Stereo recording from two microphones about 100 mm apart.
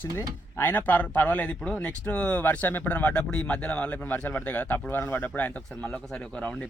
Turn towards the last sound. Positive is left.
turn(degrees=10)  # may be behind; listen again after turning